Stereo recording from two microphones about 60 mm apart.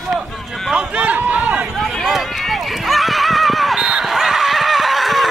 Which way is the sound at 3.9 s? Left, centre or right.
Centre.